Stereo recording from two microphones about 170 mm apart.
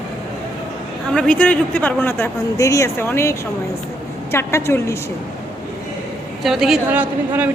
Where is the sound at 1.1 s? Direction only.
5° left (ahead or behind).